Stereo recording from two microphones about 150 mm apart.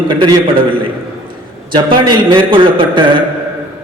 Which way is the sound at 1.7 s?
30° right (ahead or behind).